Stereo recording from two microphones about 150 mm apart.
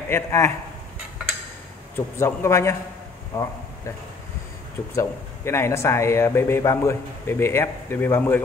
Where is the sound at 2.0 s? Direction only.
20° left (ahead or behind).